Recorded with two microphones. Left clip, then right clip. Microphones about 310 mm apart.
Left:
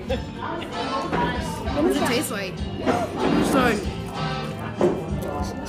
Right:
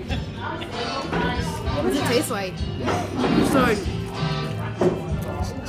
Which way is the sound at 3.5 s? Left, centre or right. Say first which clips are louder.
Even; centre.